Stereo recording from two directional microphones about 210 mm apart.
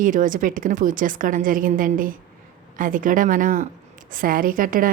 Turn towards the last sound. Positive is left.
turn(degrees=-40)  # may be behind; listen again after turning